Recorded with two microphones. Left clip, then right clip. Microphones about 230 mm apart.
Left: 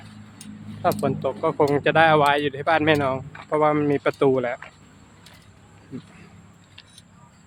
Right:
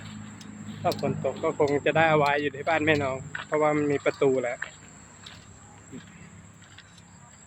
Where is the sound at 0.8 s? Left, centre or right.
Left.